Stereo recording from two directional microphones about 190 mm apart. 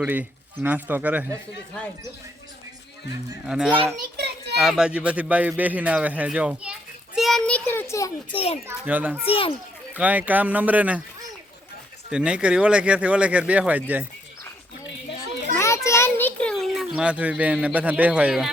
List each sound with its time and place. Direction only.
0.0 s a man's voice: 10° right (ahead or behind)
3.4 s a child's voice: 5° right (ahead or behind)
7.2 s child singing: centre (ahead or behind); by 8.4 s 15° left (ahead or behind)
8.6 s a man's voice: 10° right (ahead or behind)
9.2 s a child's voice: 30° left (ahead or behind)
9.9 s a man's voice: 5° right (ahead or behind)
12.1 s a man's voice: 5° right (ahead or behind)
15.5 s a sound: 15° left (ahead or behind); by 18.5 s 5° right (ahead or behind)